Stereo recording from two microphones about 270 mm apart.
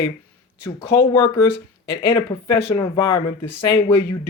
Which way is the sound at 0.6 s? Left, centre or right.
Centre.